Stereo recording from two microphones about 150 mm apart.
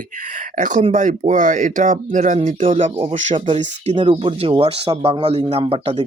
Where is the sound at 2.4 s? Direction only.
40° right (ahead or behind).